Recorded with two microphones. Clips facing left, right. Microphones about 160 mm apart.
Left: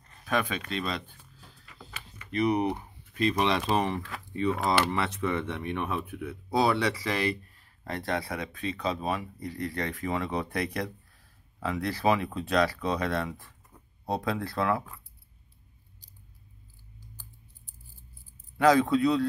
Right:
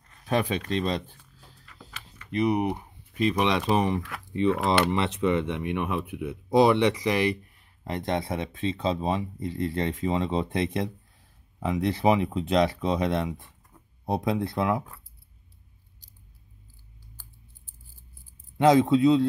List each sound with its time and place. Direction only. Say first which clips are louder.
0.3 s speech: right 4 dB; 30° right (ahead or behind)
1.7 s a sound: even; 10° left (ahead or behind)
2.3 s speech: right 1 dB; 15° right (ahead or behind)
18.6 s speech: right 3 dB; 20° right (ahead or behind)